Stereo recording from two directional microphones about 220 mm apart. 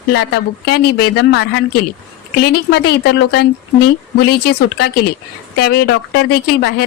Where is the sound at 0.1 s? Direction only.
50° left (ahead or behind).